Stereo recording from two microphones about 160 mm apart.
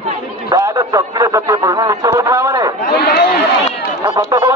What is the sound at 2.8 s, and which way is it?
Chatter, 90° left.